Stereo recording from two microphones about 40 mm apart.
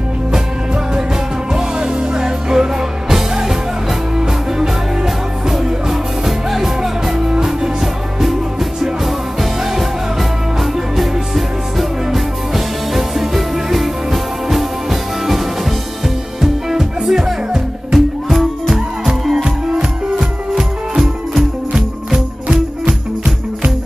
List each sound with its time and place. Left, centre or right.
1.5 s music: centre
4.6 s music: centre
19.3 s music: centre
21.0 s music: centre